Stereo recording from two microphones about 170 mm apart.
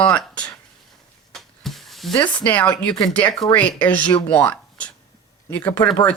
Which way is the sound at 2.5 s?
10° left (ahead or behind).